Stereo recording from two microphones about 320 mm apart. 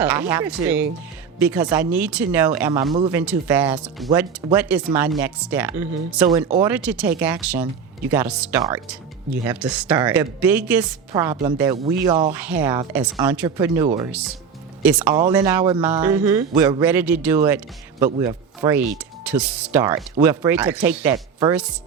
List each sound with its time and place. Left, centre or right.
0.0 s speech: centre